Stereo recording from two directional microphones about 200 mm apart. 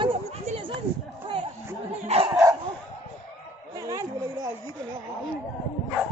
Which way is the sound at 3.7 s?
15° right (ahead or behind).